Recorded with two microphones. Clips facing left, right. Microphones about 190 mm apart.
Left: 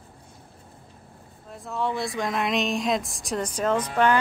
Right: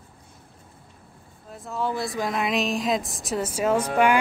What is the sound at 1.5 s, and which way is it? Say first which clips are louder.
Speech: even; centre (ahead or behind).